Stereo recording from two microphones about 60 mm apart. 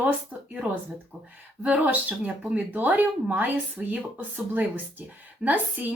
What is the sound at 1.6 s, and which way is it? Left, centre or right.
Speech, right.